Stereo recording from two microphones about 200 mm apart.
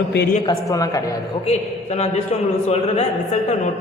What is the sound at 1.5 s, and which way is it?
A man's voice, 35° left (ahead or behind).